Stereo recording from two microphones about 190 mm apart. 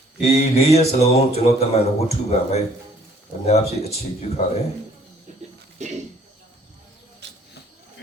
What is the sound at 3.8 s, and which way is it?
Speech, 35° left (ahead or behind).